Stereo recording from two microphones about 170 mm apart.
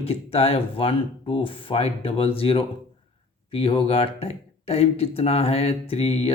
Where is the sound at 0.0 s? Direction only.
35° left (ahead or behind).